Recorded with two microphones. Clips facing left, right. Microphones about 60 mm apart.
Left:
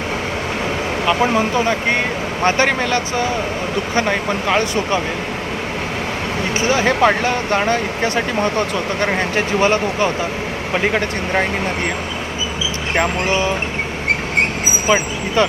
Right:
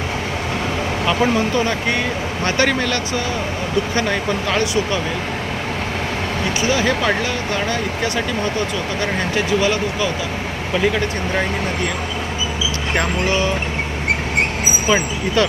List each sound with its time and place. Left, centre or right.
1.2 s speech: centre
6.6 s speech: left
13.0 s speech: left
14.8 s speech: centre